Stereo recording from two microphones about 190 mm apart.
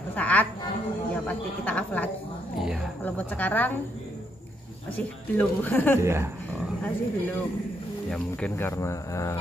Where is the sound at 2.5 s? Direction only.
5° right (ahead or behind).